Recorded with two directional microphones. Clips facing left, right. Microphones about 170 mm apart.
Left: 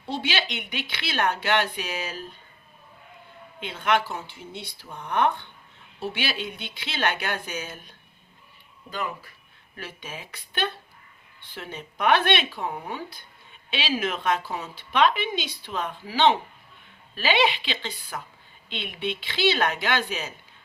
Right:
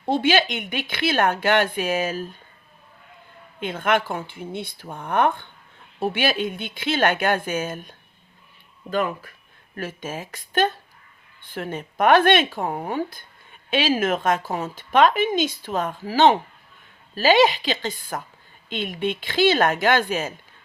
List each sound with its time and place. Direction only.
0.0 s a woman's voice: 50° right (ahead or behind)
3.6 s a woman's voice: 50° right (ahead or behind)